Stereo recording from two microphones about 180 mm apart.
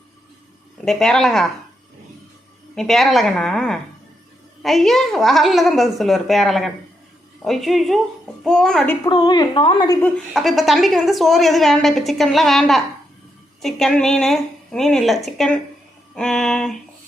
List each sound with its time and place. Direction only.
0.9 s a woman's voice: 5° left (ahead or behind)
2.7 s a woman's voice: centre (ahead or behind)
9.0 s a woman's voice: 25° left (ahead or behind)
10.0 s a woman's voice: centre (ahead or behind)